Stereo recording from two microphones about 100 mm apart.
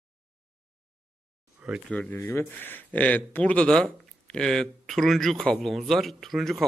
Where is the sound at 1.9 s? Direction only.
15° left (ahead or behind).